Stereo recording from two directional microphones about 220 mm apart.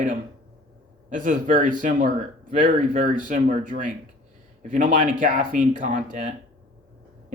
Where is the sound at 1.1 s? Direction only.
35° right (ahead or behind).